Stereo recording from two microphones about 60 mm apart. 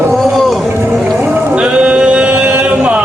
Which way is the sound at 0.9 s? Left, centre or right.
Centre.